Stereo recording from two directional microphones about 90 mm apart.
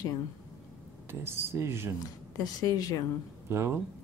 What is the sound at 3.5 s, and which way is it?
Speech, 30° right (ahead or behind).